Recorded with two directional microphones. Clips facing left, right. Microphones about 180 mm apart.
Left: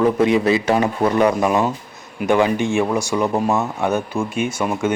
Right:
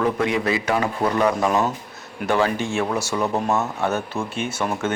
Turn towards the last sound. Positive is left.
turn(degrees=10)  # may be behind; listen again after turning